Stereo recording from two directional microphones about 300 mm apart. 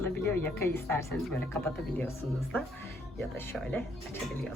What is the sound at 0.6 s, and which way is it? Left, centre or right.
Speech, centre.